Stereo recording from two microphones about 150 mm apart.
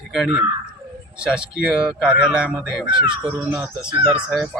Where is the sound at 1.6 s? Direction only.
5° right (ahead or behind).